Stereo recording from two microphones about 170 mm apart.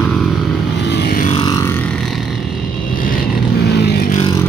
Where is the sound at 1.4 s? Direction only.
20° left (ahead or behind).